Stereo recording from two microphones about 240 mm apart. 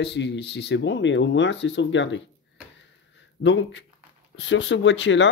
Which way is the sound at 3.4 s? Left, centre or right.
Left.